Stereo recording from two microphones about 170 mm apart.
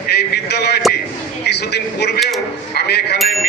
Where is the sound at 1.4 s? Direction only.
75° left (ahead or behind).